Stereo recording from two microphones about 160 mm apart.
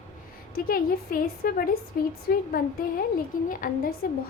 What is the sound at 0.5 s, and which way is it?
A woman's voice, 65° left (ahead or behind).